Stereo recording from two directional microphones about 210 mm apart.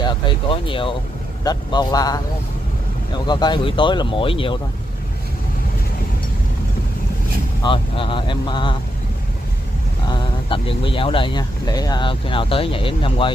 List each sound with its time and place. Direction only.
0.0 s speech: 25° left (ahead or behind)
3.3 s speech: 20° left (ahead or behind)
7.6 s speech: 25° left (ahead or behind)
10.0 s speech: 25° left (ahead or behind)